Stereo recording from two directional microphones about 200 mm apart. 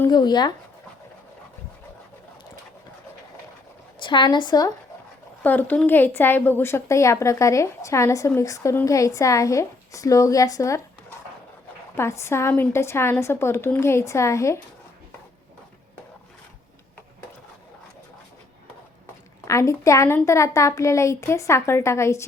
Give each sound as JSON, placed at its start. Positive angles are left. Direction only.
{"t": 0.0, "sound": "a woman's voice", "side_deg": 20}
{"t": 4.0, "sound": "a woman's voice", "side_deg": 25}
{"t": 5.4, "sound": "a woman's voice", "side_deg": 10}
{"t": 11.9, "sound": "a woman's voice", "side_deg": 15}
{"t": 19.5, "sound": "a woman's voice", "side_deg": 15}